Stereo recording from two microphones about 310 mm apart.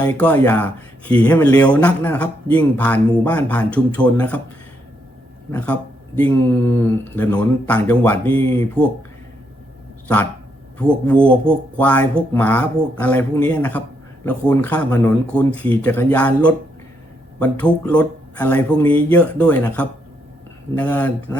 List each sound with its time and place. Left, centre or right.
0.0 s a man's voice: centre
5.5 s a man's voice: centre
10.8 s a man's voice: centre